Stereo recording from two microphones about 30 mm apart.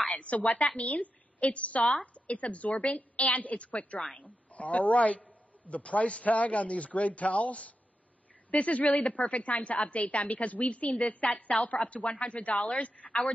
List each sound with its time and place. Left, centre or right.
0.2 s a man's voice: left
2.9 s a woman's voice: left
4.1 s a man's voice: left